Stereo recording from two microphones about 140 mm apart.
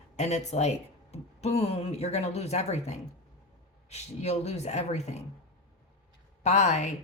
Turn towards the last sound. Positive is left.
turn(degrees=55)  # may be behind; listen again after turning